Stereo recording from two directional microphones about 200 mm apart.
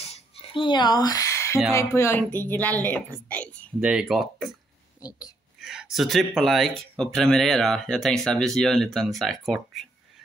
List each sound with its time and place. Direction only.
0.0 s a sound: 30° left (ahead or behind); by 1.6 s 15° left (ahead or behind)
1.7 s a woman's voice: 15° left (ahead or behind)
3.8 s speech: 5° right (ahead or behind)
5.6 s speech: centre (ahead or behind)